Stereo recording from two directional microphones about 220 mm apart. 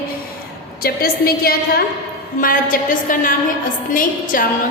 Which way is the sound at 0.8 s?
45° left (ahead or behind).